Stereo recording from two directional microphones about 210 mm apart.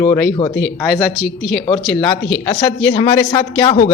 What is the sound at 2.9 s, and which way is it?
Speech, 20° left (ahead or behind).